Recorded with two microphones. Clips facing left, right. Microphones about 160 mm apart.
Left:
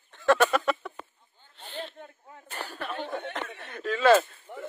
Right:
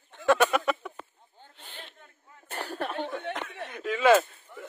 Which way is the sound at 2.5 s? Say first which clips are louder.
Right 3 dB; 50° right (ahead or behind).